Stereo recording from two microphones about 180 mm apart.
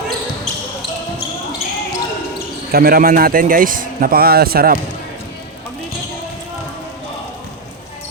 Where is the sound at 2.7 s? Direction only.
60° right (ahead or behind).